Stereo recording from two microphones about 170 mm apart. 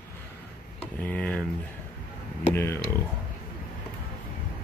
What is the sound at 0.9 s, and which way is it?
Speech, 10° left (ahead or behind).